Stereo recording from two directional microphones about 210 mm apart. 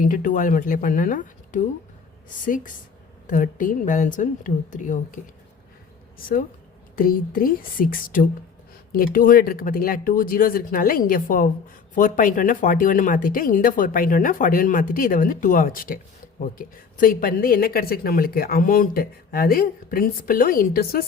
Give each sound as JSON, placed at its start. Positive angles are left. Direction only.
{"t": 0.0, "sound": "speech", "side_deg": 40}
{"t": 3.2, "sound": "a woman's voice", "side_deg": 40}